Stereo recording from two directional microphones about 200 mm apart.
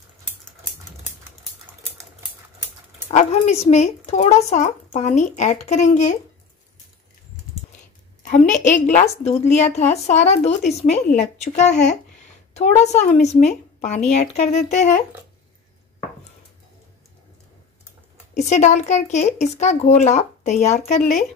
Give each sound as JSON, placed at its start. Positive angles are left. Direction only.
{"t": 3.1, "sound": "a woman's voice", "side_deg": 35}
{"t": 8.2, "sound": "a woman's voice", "side_deg": 40}
{"t": 18.3, "sound": "a woman's voice", "side_deg": 35}